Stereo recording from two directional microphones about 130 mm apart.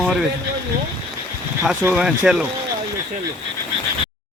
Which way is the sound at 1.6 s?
10° right (ahead or behind).